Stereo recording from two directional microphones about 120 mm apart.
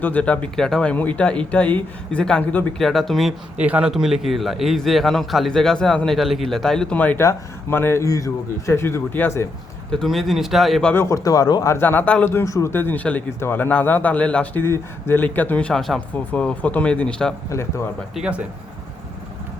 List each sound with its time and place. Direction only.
0.0 s a man's voice: 10° left (ahead or behind)
3.6 s a man's voice: 10° right (ahead or behind); by 9.5 s 20° left (ahead or behind)
9.9 s a man's voice: centre (ahead or behind)
10.9 s speech: 25° left (ahead or behind)
11.7 s a man's voice: 15° left (ahead or behind)
17.5 s speech: 25° left (ahead or behind)
18.1 s speech: 10° right (ahead or behind)